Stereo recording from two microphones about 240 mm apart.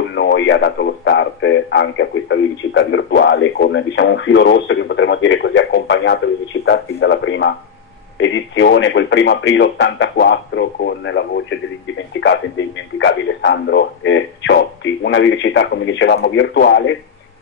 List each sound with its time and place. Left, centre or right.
0.1 s speech: left